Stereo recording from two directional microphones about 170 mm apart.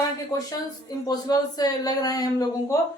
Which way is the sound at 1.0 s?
20° left (ahead or behind).